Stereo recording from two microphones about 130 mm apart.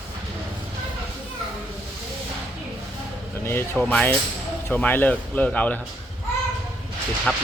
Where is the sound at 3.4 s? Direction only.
15° left (ahead or behind).